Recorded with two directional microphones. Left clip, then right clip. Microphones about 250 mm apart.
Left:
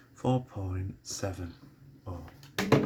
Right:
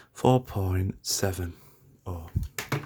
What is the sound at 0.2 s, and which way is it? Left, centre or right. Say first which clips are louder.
Speech: right 8 dB; right.